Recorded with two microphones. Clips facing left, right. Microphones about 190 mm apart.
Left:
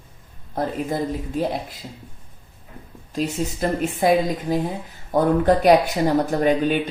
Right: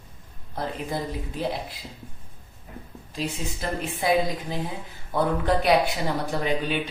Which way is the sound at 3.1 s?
45° left (ahead or behind).